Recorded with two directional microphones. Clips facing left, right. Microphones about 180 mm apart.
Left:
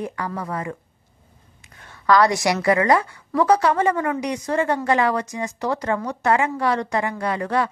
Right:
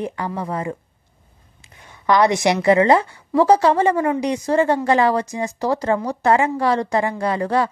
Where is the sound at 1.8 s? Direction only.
20° right (ahead or behind).